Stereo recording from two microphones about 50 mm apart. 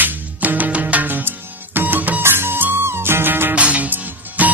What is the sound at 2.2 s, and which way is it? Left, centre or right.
Music, right.